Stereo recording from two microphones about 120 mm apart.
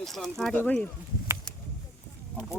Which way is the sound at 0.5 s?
15° left (ahead or behind).